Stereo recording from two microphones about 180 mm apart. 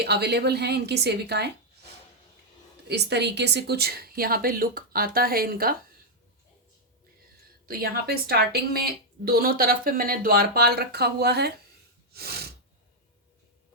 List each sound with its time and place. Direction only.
0.0 s a woman's voice: 65° right (ahead or behind)
2.8 s a woman's voice: 65° right (ahead or behind)
7.7 s a woman's voice: 55° right (ahead or behind)
12.1 s sneeze: 60° right (ahead or behind)